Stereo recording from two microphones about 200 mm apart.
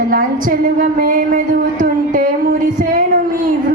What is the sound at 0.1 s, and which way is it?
A woman's voice, 40° right (ahead or behind).